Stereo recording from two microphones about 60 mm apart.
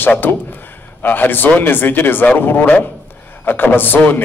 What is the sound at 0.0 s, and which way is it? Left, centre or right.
A man's voice, left.